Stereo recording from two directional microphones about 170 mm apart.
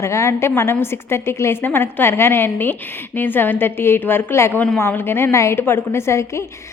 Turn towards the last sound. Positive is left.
turn(degrees=15)  # may be behind; listen again after turning